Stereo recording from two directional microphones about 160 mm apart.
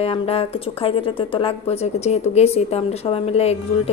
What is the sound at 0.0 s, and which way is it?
Speech, 35° left (ahead or behind).